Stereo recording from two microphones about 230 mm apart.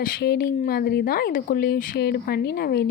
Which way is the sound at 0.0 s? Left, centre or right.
Left.